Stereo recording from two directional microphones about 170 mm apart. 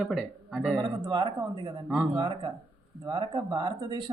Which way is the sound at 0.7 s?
25° right (ahead or behind).